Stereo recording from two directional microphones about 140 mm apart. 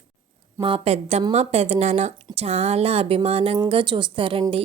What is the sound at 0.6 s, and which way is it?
A woman's voice, 45° right (ahead or behind).